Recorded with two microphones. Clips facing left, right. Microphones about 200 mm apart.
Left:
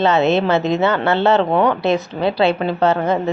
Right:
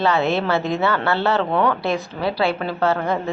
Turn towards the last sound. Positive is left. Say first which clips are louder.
# left 4 dB
turn(degrees=20)  # may be behind; listen again after turning